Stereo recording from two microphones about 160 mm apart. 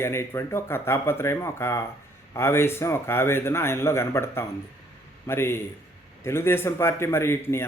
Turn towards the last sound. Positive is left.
turn(degrees=15)  # may be behind; listen again after turning